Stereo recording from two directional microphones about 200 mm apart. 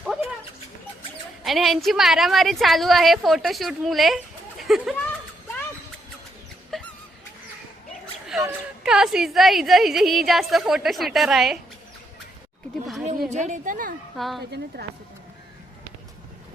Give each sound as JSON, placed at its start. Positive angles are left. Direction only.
{"t": 0.0, "sound": "dog", "side_deg": 0}
{"t": 1.5, "sound": "a woman's voice", "side_deg": 0}
{"t": 6.7, "sound": "dog", "side_deg": 0}
{"t": 8.3, "sound": "a woman's voice", "side_deg": 0}
{"t": 13.3, "sound": "a woman's voice", "side_deg": -35}
{"t": 14.2, "sound": "a woman's voice", "side_deg": 0}
{"t": 14.7, "sound": "speech", "side_deg": -55}